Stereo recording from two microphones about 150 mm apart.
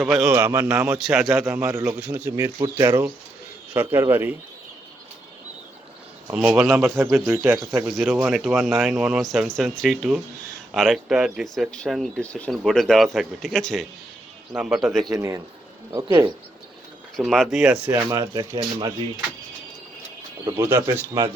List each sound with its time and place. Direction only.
0.0 s speech: 5° right (ahead or behind)
0.3 s speech: 15° right (ahead or behind)
0.9 s speech: centre (ahead or behind)
1.5 s speech: 15° right (ahead or behind)
6.3 s speech: 5° right (ahead or behind)
15.1 s speech: 20° right (ahead or behind)
17.2 s speech: centre (ahead or behind)
17.8 s speech: 20° right (ahead or behind)
20.4 s speech: 15° right (ahead or behind)